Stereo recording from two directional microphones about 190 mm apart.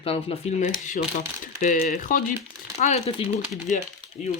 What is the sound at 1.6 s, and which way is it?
Speech, 45° left (ahead or behind).